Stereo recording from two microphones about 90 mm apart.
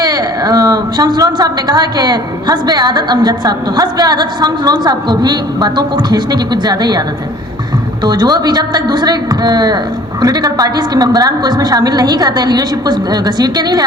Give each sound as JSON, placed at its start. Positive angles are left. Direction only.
{"t": 0.0, "sound": "a woman's voice", "side_deg": -45}
{"t": 8.0, "sound": "a woman's voice", "side_deg": -50}